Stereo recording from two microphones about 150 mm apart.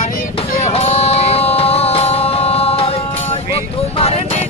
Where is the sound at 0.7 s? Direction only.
45° left (ahead or behind).